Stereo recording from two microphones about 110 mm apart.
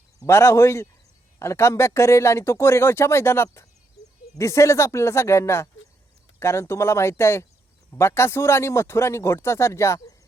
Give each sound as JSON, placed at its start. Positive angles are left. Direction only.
{"t": 0.2, "sound": "speech", "side_deg": 25}
{"t": 4.0, "sound": "a sound", "side_deg": 35}
{"t": 4.4, "sound": "speech", "side_deg": 25}